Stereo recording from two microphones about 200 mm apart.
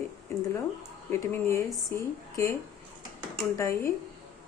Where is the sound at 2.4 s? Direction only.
15° left (ahead or behind).